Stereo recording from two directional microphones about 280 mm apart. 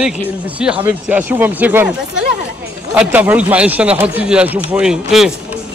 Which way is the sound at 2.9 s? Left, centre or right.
Centre.